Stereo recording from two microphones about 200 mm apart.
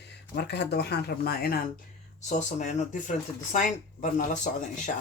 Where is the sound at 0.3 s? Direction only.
55° left (ahead or behind).